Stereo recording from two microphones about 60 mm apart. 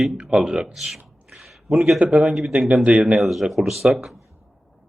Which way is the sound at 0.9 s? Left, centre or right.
Centre.